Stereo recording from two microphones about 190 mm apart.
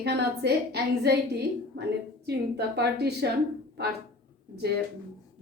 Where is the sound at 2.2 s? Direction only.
60° right (ahead or behind).